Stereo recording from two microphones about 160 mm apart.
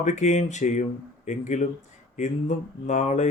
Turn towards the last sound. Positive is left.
turn(degrees=45)  # may be behind; listen again after turning